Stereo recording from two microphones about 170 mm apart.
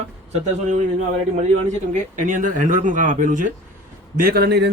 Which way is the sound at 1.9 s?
50° right (ahead or behind).